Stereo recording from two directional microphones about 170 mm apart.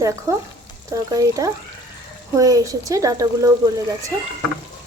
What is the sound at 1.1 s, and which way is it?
Speech, 20° right (ahead or behind).